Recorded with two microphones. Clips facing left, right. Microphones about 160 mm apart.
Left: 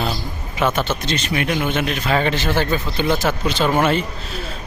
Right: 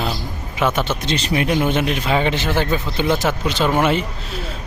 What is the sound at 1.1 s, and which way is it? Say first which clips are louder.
Speech: right 2 dB; 25° right (ahead or behind).